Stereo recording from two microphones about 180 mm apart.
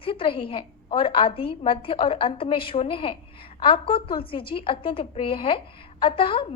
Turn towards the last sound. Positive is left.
turn(degrees=30)  # may be behind; listen again after turning